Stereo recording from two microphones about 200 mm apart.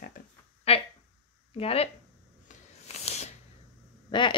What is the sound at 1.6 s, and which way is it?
Speech, 30° left (ahead or behind).